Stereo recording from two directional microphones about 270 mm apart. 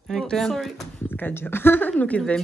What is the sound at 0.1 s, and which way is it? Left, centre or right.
Speech, centre.